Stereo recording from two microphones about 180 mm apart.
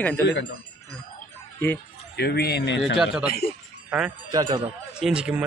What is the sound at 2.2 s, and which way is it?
Speech, 60° left (ahead or behind).